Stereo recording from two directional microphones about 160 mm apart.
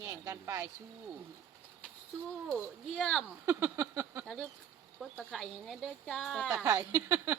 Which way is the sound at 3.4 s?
15° right (ahead or behind).